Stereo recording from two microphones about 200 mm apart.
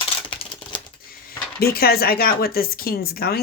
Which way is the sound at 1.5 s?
50° left (ahead or behind).